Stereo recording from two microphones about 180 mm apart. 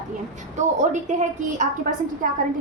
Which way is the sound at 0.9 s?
40° right (ahead or behind).